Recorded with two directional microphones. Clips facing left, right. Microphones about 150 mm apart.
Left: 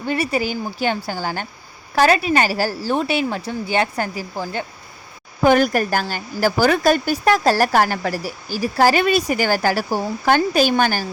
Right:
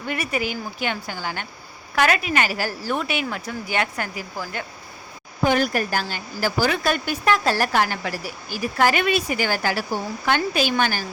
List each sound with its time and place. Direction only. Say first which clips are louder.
0.0 s speech: left 5 dB; 30° left (ahead or behind)
5.4 s speech: left 5 dB; 50° left (ahead or behind)